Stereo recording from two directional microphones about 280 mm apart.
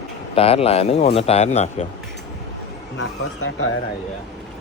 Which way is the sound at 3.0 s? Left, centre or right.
Left.